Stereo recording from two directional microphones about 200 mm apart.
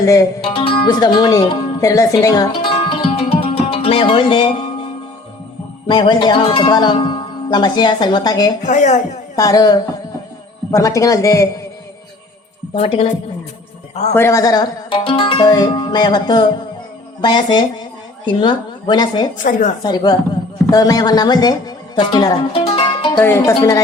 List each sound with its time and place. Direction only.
0.0 s a man's voice: 15° left (ahead or behind)
5.9 s speech: 20° left (ahead or behind)
8.6 s speech: 35° left (ahead or behind)
9.3 s a man's voice: 15° left (ahead or behind)
12.7 s speech: 30° left (ahead or behind)
14.1 s speech: 15° left (ahead or behind)
19.4 s speech: 40° left (ahead or behind)
19.8 s speech: 20° left (ahead or behind)
23.2 s a man's voice: 15° left (ahead or behind)